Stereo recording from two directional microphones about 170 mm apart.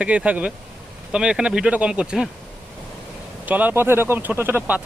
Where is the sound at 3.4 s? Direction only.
10° right (ahead or behind).